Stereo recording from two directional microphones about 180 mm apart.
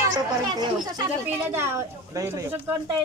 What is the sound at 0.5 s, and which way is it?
Speech, 25° right (ahead or behind).